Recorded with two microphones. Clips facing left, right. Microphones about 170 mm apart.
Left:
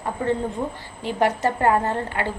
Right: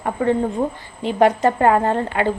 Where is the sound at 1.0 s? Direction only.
20° right (ahead or behind).